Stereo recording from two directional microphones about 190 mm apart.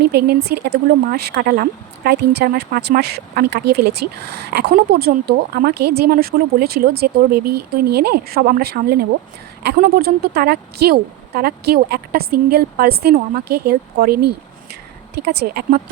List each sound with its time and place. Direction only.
0.0 s speech: 55° right (ahead or behind)